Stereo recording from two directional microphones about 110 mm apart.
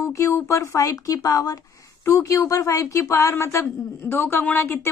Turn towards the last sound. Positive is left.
turn(degrees=20)  # may be behind; listen again after turning